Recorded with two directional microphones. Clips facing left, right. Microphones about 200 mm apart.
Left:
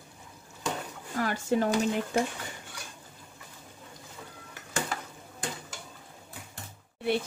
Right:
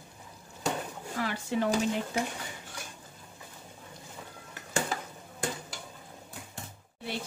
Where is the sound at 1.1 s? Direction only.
45° left (ahead or behind).